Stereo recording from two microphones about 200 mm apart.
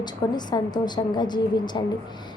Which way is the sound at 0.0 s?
20° left (ahead or behind).